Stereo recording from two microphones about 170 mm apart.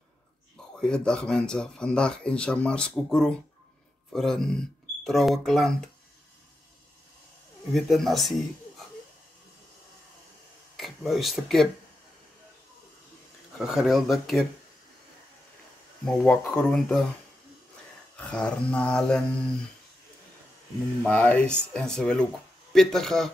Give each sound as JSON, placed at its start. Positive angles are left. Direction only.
{"t": 0.7, "sound": "speech", "side_deg": 5}
{"t": 7.7, "sound": "speech", "side_deg": 0}
{"t": 10.8, "sound": "speech", "side_deg": 0}
{"t": 13.6, "sound": "speech", "side_deg": -5}
{"t": 16.1, "sound": "speech", "side_deg": 5}
{"t": 18.1, "sound": "mantra", "side_deg": 5}
{"t": 21.0, "sound": "speech", "side_deg": 10}